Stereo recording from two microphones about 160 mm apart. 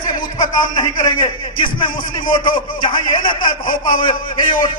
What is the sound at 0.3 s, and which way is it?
A man's voice, 25° left (ahead or behind).